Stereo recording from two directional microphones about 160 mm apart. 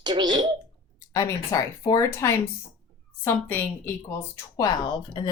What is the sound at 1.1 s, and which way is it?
A woman's voice, 20° left (ahead or behind).